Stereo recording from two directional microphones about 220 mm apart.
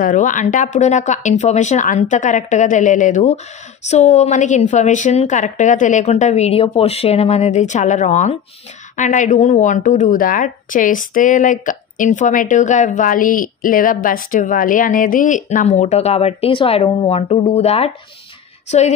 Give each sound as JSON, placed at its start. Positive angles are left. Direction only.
{"t": 0.0, "sound": "a woman's voice", "side_deg": 35}